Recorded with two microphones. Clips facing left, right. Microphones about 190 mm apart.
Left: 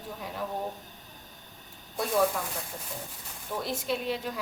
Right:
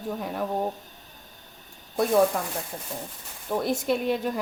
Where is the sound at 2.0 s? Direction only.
50° right (ahead or behind).